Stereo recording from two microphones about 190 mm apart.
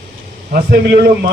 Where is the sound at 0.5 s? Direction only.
50° right (ahead or behind).